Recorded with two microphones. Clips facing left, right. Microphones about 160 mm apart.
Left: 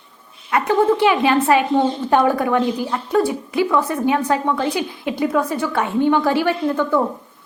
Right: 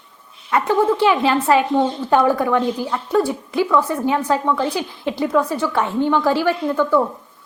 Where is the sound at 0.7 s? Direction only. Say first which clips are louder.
Left 1 dB; 15° left (ahead or behind).